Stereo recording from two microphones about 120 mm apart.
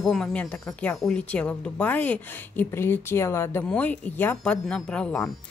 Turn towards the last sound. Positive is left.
turn(degrees=5)  # may be behind; listen again after turning